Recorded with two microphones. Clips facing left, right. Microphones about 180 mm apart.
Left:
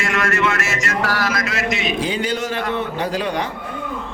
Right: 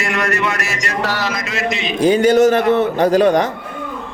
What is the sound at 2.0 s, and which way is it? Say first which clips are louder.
A man's voice: right 11 dB; 45° right (ahead or behind).